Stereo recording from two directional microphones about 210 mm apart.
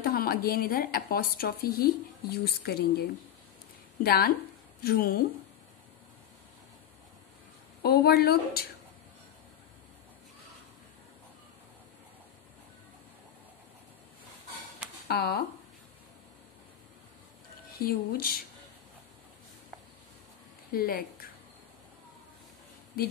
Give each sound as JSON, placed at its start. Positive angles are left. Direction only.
{"t": 0.0, "sound": "a woman's voice", "side_deg": 45}
{"t": 7.8, "sound": "a woman's voice", "side_deg": 45}
{"t": 15.0, "sound": "a woman's voice", "side_deg": 50}
{"t": 17.7, "sound": "a woman's voice", "side_deg": 45}
{"t": 20.7, "sound": "a woman's voice", "side_deg": 45}